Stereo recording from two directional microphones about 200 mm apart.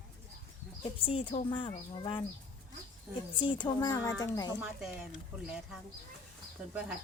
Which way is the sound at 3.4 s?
25° left (ahead or behind).